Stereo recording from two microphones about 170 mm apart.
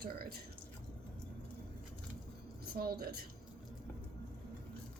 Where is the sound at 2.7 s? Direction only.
65° right (ahead or behind).